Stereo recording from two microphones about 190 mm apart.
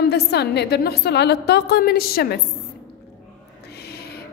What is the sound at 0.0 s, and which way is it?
Speech, 60° left (ahead or behind).